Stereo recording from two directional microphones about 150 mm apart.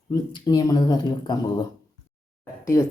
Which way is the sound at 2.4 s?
20° left (ahead or behind).